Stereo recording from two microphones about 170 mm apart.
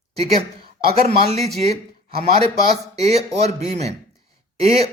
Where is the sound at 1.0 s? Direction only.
40° right (ahead or behind).